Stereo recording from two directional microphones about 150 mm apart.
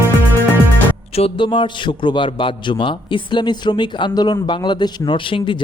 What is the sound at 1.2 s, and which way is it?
A man's voice, 35° left (ahead or behind).